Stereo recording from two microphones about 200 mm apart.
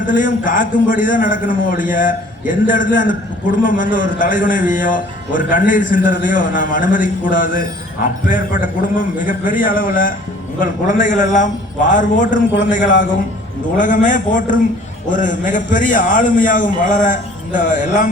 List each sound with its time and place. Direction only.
0.1 s a man's voice: 40° left (ahead or behind)